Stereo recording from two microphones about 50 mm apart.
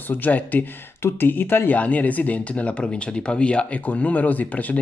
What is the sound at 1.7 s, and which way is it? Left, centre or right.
Speech, left.